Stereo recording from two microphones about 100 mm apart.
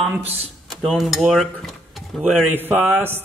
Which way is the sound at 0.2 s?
90° right.